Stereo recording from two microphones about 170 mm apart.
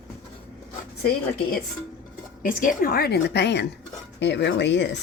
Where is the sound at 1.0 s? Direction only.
60° left (ahead or behind).